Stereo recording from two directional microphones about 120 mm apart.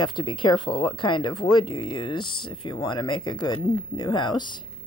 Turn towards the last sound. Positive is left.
turn(degrees=40)  # may be behind; listen again after turning